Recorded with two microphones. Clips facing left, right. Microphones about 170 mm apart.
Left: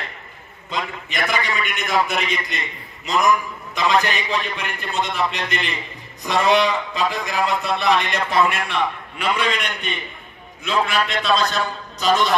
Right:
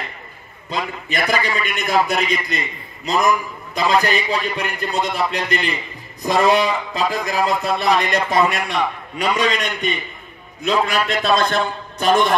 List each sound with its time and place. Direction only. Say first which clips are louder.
0.7 s a man's voice: right 3 dB; 35° right (ahead or behind)
11.2 s a man's voice: right 4 dB; 50° right (ahead or behind)